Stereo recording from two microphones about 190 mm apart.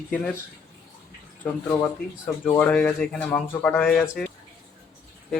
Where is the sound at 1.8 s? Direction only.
10° left (ahead or behind).